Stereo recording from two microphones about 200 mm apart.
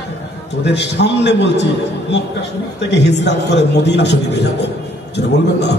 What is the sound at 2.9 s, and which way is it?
A man's voice, 60° left (ahead or behind).